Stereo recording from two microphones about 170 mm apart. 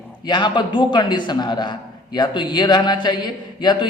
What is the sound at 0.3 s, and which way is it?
A woman's voice, 25° left (ahead or behind).